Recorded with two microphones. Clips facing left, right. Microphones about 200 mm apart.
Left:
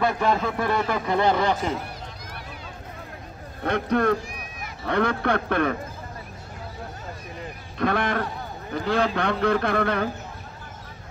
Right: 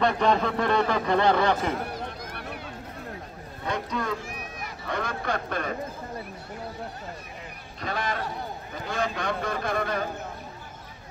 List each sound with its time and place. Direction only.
0.0 s a man's voice: 5° left (ahead or behind)
2.3 s vehicle: 60° right (ahead or behind)
3.6 s a man's voice: 60° left (ahead or behind)
7.8 s a man's voice: 60° left (ahead or behind)